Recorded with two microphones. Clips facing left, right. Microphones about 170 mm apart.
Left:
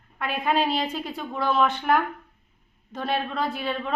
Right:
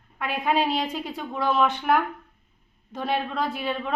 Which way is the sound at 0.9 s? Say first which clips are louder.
Even; 10° right (ahead or behind).